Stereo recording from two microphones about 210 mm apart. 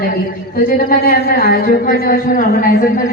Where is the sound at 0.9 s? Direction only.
45° left (ahead or behind).